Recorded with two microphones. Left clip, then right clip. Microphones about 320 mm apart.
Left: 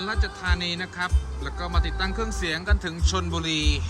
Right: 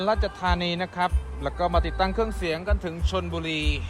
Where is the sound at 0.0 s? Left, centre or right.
Centre.